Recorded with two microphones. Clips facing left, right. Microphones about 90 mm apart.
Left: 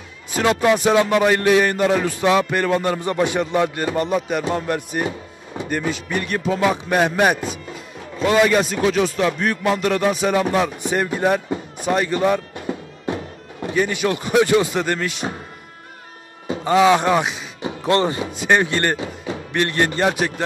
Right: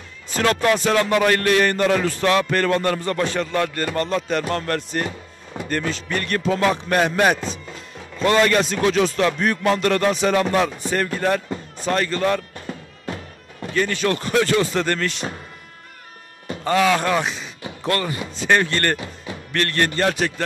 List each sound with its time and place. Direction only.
0.3 s speech: 10° left (ahead or behind)
16.4 s speech: 15° left (ahead or behind)
18.3 s speech: 15° left (ahead or behind)